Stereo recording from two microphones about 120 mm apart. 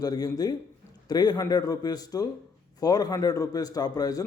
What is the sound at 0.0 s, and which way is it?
A man's voice, 30° left (ahead or behind).